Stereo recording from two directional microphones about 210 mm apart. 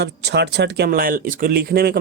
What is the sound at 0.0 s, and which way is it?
Speech, 55° right (ahead or behind).